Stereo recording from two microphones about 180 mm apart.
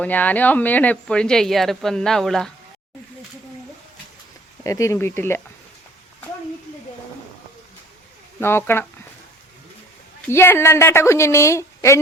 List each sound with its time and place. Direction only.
0.0 s speech: 10° left (ahead or behind)
4.6 s a woman's voice: 15° left (ahead or behind)
8.4 s a woman's voice: 15° left (ahead or behind)
10.2 s a woman's voice: 15° left (ahead or behind)